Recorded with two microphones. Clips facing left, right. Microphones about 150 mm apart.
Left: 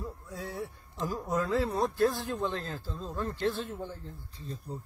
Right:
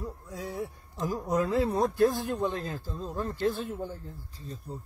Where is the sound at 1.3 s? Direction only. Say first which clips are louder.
Right 3 dB; 20° right (ahead or behind).